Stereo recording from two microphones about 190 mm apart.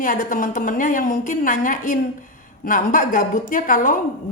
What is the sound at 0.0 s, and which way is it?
A woman's voice, 45° left (ahead or behind).